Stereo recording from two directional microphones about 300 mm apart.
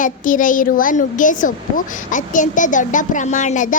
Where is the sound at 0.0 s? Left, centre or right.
Left.